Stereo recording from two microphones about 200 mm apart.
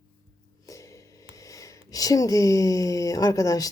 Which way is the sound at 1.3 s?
15° left (ahead or behind).